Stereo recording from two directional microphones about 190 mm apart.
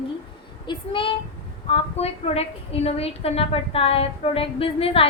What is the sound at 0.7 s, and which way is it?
A woman's voice, 25° left (ahead or behind).